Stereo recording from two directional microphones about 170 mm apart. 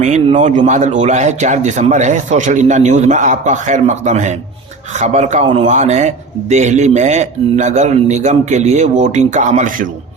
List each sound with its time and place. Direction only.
0.0 s a man's voice: 45° right (ahead or behind)